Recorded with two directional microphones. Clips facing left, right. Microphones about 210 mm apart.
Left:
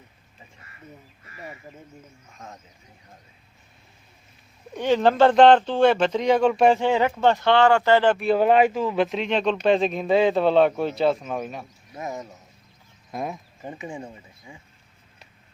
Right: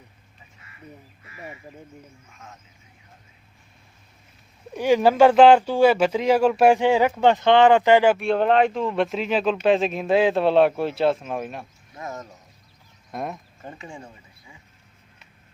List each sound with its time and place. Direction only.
2.3 s speech: 35° left (ahead or behind)
4.7 s speech: 10° right (ahead or behind)
8.2 s speech: 5° left (ahead or behind)
11.9 s speech: 15° left (ahead or behind)
13.1 s a sound: centre (ahead or behind)
13.7 s speech: 20° left (ahead or behind)